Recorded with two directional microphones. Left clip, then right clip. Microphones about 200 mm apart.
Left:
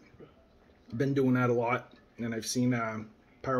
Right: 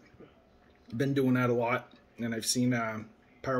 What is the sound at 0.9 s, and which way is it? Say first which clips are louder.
Speech: even; 10° right (ahead or behind).